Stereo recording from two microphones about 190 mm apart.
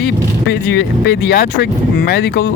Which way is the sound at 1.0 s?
60° left (ahead or behind).